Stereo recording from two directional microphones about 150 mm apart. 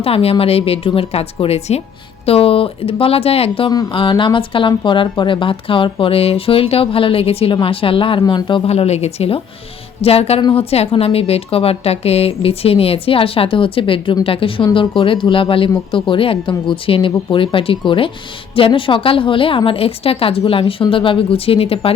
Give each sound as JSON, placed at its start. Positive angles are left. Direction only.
{"t": 0.0, "sound": "a woman's voice", "side_deg": 40}